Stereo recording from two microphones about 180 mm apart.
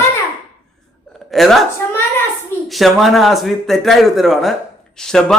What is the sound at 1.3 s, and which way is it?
Speech, centre (ahead or behind).